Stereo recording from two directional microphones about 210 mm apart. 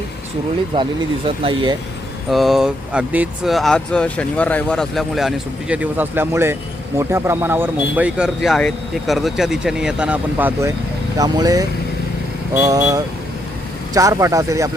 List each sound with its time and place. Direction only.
0.7 s speech: 25° right (ahead or behind)
2.3 s speech: centre (ahead or behind)